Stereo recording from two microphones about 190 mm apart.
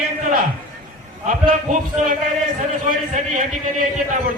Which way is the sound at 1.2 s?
40° right (ahead or behind).